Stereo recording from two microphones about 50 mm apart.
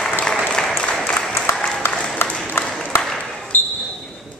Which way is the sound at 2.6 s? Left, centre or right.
Left.